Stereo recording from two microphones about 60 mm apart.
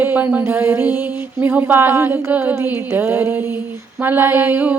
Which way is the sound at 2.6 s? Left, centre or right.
Right.